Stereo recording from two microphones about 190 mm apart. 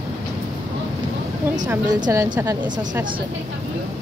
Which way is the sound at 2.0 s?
20° right (ahead or behind).